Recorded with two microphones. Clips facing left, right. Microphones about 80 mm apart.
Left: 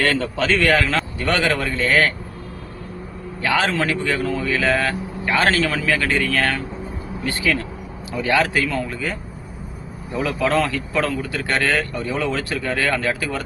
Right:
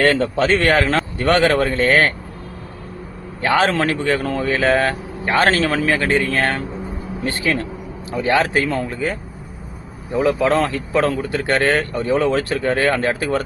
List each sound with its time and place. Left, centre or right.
0.0 s a man's voice: right
3.4 s a man's voice: right